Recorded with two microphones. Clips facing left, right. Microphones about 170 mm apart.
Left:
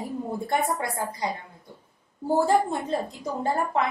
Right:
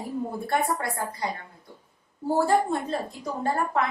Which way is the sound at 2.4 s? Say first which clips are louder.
Even; 20° left (ahead or behind).